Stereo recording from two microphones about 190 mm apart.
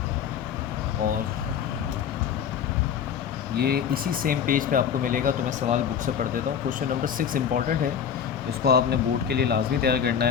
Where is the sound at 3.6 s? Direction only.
55° right (ahead or behind).